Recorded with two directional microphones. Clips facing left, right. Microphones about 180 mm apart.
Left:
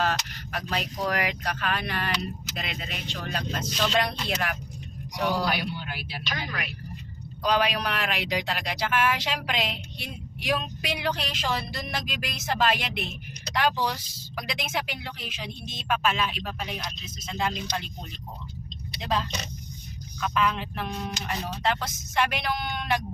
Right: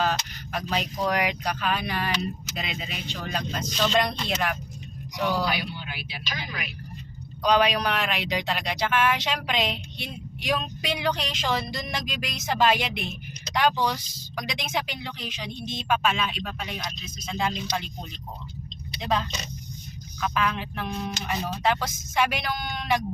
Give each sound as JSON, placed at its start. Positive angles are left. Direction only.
{"t": 0.0, "sound": "speech", "side_deg": 0}
{"t": 5.5, "sound": "speech", "side_deg": 45}
{"t": 7.4, "sound": "speech", "side_deg": 5}
{"t": 20.3, "sound": "speech", "side_deg": -5}